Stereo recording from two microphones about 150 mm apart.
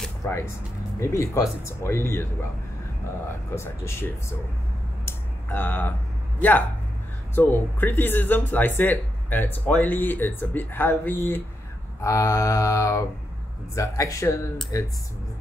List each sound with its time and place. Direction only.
0.2 s speech: 20° left (ahead or behind)
0.9 s mantra: 20° left (ahead or behind)
1.6 s speech: 20° left (ahead or behind)
3.3 s speech: 15° left (ahead or behind)
5.0 s a sound: 15° left (ahead or behind)
7.3 s speech: 15° left (ahead or behind)
12.0 s mantra: 20° left (ahead or behind)